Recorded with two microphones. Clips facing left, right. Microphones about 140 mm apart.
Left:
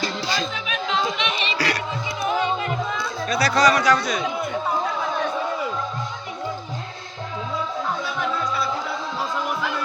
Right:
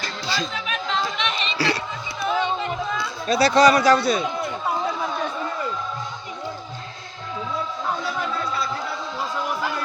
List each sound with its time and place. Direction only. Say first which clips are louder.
0.3 s a sound: left 1 dB; 5° left (ahead or behind)
1.5 s music: right 3 dB; 25° right (ahead or behind)
3.2 s speech: right 3 dB; 25° right (ahead or behind)